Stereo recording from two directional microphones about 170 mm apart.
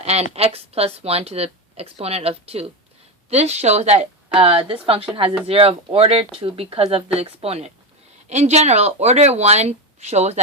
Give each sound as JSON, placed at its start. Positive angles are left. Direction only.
{"t": 0.0, "sound": "speech", "side_deg": -40}